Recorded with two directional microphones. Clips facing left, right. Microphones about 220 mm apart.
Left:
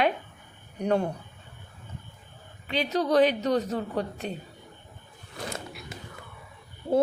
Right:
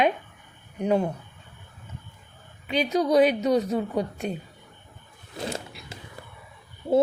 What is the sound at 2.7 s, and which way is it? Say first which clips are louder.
A woman's voice: right 3 dB; 15° right (ahead or behind).